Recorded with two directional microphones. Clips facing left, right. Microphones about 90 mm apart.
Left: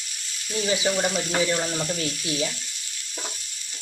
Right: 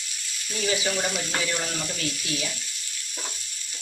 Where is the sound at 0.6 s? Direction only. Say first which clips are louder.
Left 2 dB; 20° left (ahead or behind).